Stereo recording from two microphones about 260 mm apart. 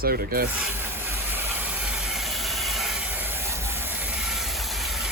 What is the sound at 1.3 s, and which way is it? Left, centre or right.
Train, centre.